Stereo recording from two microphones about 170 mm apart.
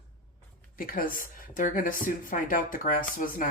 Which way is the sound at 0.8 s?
55° left (ahead or behind).